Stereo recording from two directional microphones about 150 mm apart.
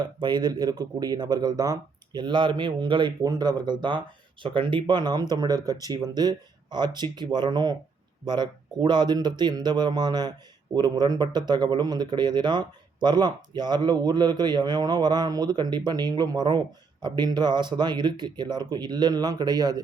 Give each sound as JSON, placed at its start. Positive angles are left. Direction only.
{"t": 0.0, "sound": "speech", "side_deg": -30}